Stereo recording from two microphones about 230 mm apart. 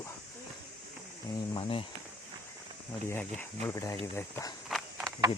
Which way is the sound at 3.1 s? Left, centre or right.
Centre.